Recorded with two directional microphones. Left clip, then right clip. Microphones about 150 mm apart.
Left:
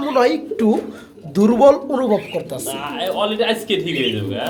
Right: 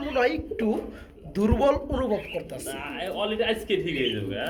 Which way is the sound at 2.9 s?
20° right (ahead or behind).